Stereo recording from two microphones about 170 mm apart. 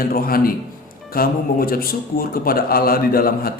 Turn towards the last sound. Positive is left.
turn(degrees=60)  # may be behind; listen again after turning